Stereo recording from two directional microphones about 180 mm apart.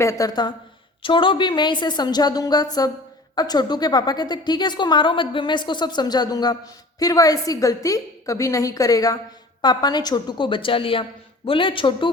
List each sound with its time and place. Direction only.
0.0 s a woman's voice: 20° left (ahead or behind)